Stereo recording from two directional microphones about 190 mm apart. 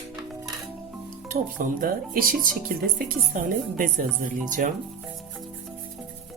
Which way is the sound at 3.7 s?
45° right (ahead or behind).